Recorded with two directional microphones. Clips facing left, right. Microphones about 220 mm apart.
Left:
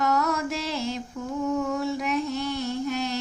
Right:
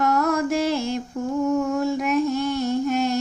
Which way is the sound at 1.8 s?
45° right (ahead or behind).